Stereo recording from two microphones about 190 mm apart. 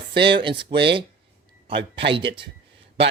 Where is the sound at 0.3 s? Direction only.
25° right (ahead or behind).